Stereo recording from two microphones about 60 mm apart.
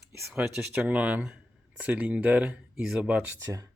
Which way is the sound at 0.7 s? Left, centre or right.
Right.